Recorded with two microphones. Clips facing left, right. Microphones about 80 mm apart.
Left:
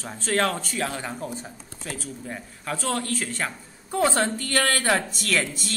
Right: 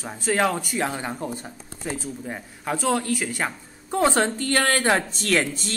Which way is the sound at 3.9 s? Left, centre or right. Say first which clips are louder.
Right 2 dB; right.